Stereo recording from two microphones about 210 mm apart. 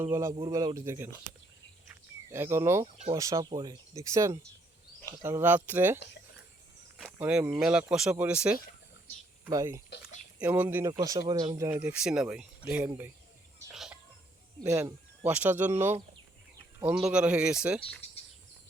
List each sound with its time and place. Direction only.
0.0 s speech: 15° right (ahead or behind)
2.3 s speech: 10° right (ahead or behind)
13.7 s chicken: centre (ahead or behind)
14.6 s speech: 15° right (ahead or behind)